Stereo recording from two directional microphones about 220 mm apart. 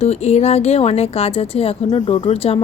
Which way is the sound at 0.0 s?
30° left (ahead or behind).